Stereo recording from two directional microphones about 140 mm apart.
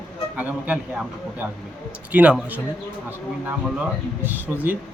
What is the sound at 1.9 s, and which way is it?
Speech, 10° right (ahead or behind).